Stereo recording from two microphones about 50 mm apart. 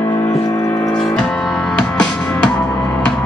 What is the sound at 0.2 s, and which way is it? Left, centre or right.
Music, left.